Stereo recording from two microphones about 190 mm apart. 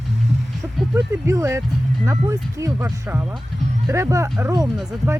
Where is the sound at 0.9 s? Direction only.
15° right (ahead or behind).